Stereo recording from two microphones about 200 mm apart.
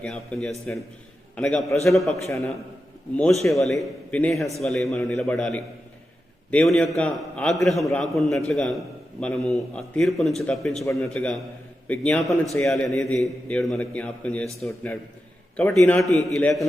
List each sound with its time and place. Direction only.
0.0 s a man's voice: 5° left (ahead or behind)
15.5 s a man's voice: 5° left (ahead or behind)